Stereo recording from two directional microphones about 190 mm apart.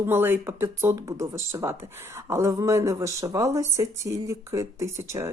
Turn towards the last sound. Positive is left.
turn(degrees=-15)  # may be behind; listen again after turning